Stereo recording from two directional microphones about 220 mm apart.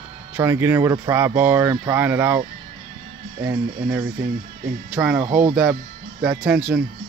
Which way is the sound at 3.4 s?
10° right (ahead or behind).